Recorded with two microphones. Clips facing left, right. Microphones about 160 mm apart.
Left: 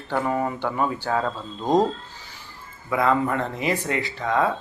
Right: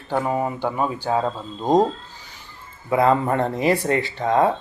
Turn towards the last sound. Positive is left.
turn(degrees=-35)  # may be behind; listen again after turning